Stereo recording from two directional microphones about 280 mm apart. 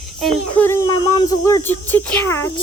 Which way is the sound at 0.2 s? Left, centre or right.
Centre.